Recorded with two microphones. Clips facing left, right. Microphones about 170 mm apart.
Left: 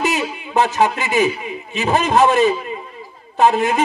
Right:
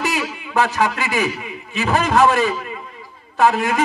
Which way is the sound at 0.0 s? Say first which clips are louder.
Left 3 dB; 25° left (ahead or behind).